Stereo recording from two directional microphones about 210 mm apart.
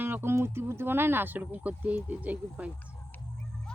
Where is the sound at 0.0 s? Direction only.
10° right (ahead or behind).